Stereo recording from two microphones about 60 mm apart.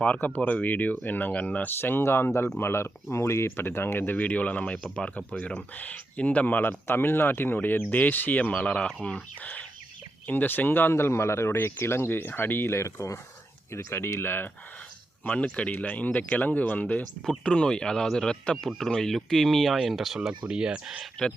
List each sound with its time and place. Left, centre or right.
0.0 s speech: left
1.8 s speech: left
3.5 s speech: left
4.2 s speech: left
8.5 s speech: centre; by 14.5 s left
15.2 s speech: left
17.2 s speech: centre
20.1 s speech: centre